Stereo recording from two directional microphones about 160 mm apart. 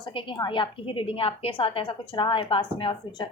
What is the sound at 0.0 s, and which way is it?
A woman's voice, 30° left (ahead or behind).